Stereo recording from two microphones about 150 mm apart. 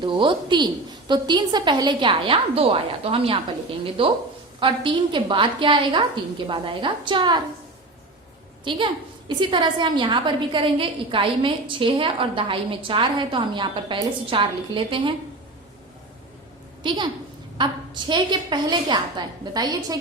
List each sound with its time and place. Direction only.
0.0 s a woman's voice: 35° right (ahead or behind)
8.6 s a woman's voice: 35° right (ahead or behind)
16.8 s a woman's voice: 30° right (ahead or behind)